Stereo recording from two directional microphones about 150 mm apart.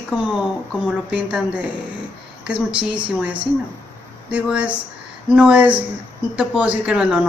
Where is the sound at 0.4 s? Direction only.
5° right (ahead or behind).